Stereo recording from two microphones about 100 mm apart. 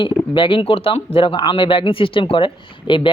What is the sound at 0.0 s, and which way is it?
Speech, 55° left (ahead or behind).